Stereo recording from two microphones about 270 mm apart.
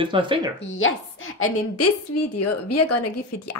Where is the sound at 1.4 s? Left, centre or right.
Left.